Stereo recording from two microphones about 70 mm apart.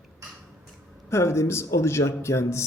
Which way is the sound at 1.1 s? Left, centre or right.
Left.